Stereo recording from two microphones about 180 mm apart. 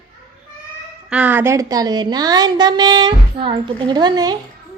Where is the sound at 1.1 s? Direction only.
10° right (ahead or behind).